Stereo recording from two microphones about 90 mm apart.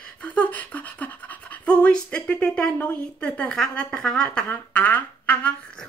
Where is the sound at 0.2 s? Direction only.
15° left (ahead or behind).